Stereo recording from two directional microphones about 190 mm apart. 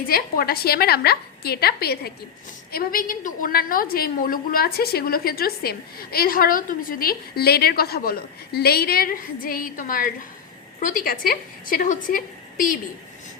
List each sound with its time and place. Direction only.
0.1 s a woman's voice: 50° left (ahead or behind)